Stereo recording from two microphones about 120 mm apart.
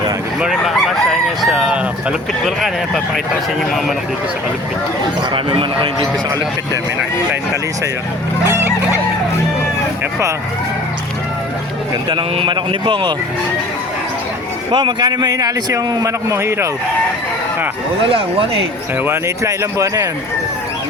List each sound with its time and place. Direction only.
1.4 s speech: 5° right (ahead or behind)
2.4 s speech: 5° left (ahead or behind)
5.3 s a man's voice: 45° right (ahead or behind)
8.4 s goose: 20° right (ahead or behind)
12.4 s a man's voice: 40° right (ahead or behind)
14.7 s a man's voice: 40° right (ahead or behind); by 16.6 s 20° right (ahead or behind)
18.1 s a man's voice: 50° right (ahead or behind)
19.0 s speech: 20° right (ahead or behind)